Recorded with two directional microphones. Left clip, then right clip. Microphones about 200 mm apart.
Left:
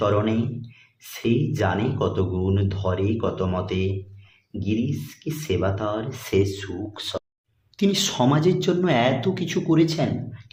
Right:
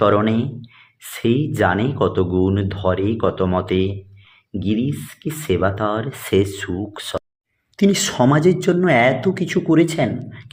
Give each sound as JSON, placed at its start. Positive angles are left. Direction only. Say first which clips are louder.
{"t": 0.0, "sound": "speech", "louder": "right 6 dB", "side_deg": -35}